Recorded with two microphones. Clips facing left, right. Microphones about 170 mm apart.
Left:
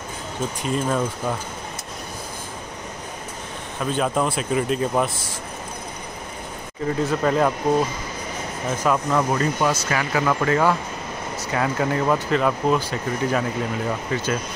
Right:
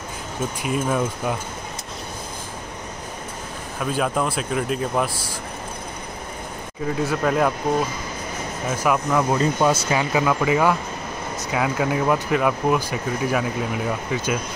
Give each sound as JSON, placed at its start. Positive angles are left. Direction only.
{"t": 0.6, "sound": "speech", "side_deg": -5}
{"t": 3.8, "sound": "speech", "side_deg": -5}
{"t": 7.0, "sound": "speech", "side_deg": -5}
{"t": 8.6, "sound": "speech", "side_deg": -5}
{"t": 9.4, "sound": "speech", "side_deg": -20}